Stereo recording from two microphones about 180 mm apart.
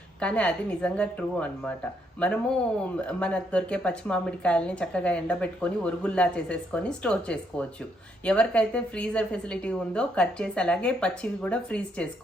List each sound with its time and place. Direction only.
0.2 s a woman's voice: 5° left (ahead or behind)